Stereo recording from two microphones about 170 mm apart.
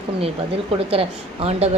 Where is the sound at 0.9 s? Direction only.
35° right (ahead or behind).